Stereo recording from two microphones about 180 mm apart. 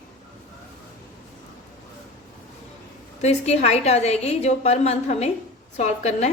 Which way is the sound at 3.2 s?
35° left (ahead or behind).